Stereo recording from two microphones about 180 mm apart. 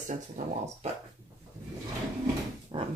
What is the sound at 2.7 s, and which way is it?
Dog, 35° right (ahead or behind).